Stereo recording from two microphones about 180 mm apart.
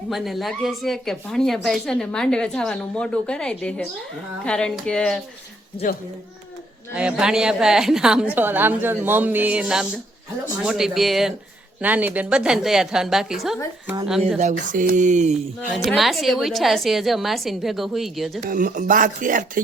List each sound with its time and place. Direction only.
0.1 s speech: centre (ahead or behind)
6.9 s speech: 5° right (ahead or behind)
14.3 s speech: 45° right (ahead or behind)
15.9 s speech: centre (ahead or behind)
18.4 s speech: 50° right (ahead or behind)